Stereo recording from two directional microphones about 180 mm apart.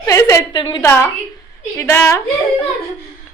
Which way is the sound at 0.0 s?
15° left (ahead or behind).